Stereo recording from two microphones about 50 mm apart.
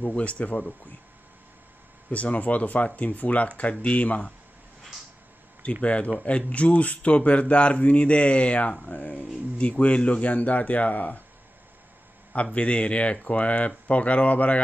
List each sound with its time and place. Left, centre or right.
0.0 s a man's voice: left
2.0 s a man's voice: left
5.6 s a man's voice: left
12.5 s a man's voice: left